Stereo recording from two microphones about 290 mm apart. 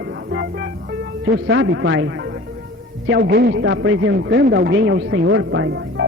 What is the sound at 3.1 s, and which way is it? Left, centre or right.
A man's voice, right.